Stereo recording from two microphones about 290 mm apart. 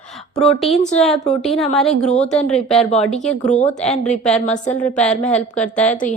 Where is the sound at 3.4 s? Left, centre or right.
Left.